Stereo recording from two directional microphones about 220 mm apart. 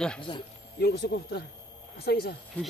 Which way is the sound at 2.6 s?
5° left (ahead or behind).